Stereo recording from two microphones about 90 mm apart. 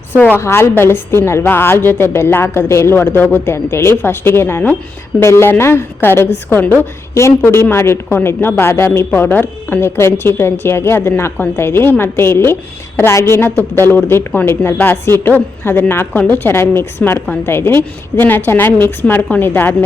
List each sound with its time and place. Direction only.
0.3 s a woman's voice: 30° left (ahead or behind)